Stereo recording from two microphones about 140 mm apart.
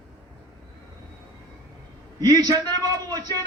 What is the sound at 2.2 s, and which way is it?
A man's voice, 30° right (ahead or behind).